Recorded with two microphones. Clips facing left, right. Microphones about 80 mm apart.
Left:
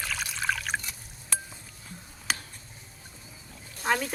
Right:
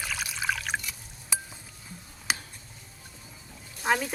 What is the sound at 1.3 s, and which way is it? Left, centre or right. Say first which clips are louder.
Dishes: even; centre.